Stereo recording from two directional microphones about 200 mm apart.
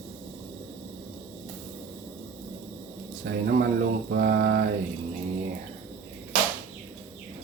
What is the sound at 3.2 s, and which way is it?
Mantra, 50° right (ahead or behind).